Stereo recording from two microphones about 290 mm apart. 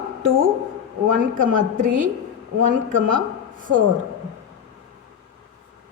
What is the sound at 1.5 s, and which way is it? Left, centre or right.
Speech, right.